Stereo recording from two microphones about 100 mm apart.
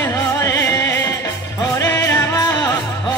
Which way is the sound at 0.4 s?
30° left (ahead or behind).